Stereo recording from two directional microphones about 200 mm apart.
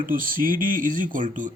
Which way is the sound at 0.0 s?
45° right (ahead or behind).